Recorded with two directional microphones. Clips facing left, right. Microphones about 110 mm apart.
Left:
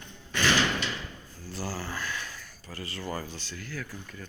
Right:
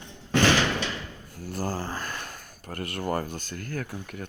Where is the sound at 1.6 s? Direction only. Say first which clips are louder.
Right 4 dB; 45° right (ahead or behind); by 4.2 s 60° right (ahead or behind).